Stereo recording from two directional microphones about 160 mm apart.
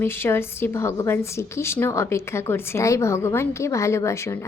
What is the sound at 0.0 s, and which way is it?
A woman's voice, 15° left (ahead or behind).